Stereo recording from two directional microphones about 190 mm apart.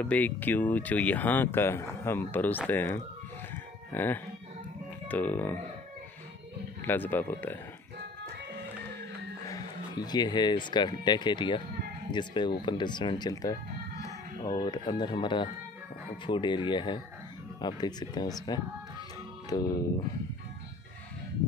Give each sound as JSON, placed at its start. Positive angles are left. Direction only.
{"t": 0.0, "sound": "speech", "side_deg": 10}
{"t": 3.5, "sound": "music", "side_deg": 10}
{"t": 5.0, "sound": "speech", "side_deg": 10}
{"t": 6.8, "sound": "speech", "side_deg": 10}
{"t": 9.5, "sound": "speech", "side_deg": 20}